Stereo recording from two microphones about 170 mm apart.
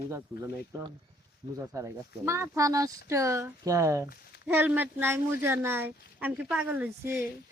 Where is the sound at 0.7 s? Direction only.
20° right (ahead or behind).